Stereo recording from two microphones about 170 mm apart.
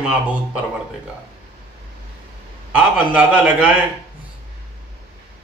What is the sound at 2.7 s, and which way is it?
A man's voice, 5° right (ahead or behind).